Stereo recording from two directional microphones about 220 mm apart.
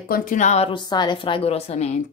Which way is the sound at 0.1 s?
35° left (ahead or behind).